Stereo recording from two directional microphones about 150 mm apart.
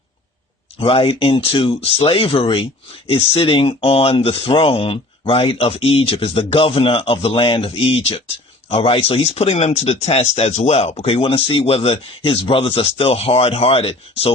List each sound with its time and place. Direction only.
0.8 s speech: 40° left (ahead or behind)